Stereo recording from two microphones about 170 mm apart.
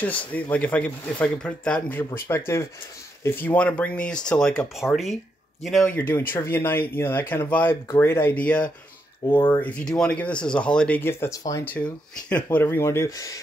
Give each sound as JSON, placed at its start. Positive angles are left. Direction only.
{"t": 0.0, "sound": "speech", "side_deg": 10}